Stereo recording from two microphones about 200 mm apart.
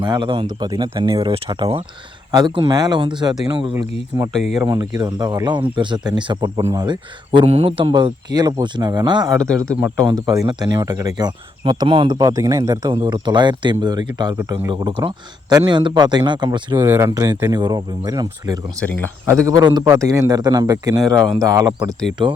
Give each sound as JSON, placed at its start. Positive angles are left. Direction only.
{"t": 0.0, "sound": "a man's voice", "side_deg": -20}